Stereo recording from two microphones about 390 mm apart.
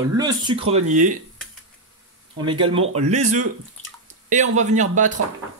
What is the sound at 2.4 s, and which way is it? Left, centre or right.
A man's voice, centre.